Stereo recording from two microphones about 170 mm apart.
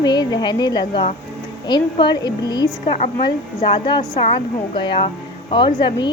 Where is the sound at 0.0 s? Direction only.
25° left (ahead or behind).